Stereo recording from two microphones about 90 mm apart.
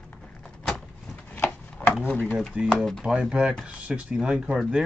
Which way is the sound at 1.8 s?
15° left (ahead or behind).